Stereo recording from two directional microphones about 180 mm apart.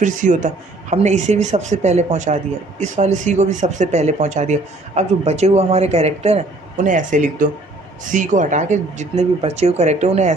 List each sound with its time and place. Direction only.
0.0 s a man's voice: 45° right (ahead or behind)